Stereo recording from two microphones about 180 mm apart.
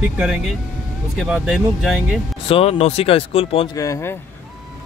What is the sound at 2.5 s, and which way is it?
Speech, 35° left (ahead or behind).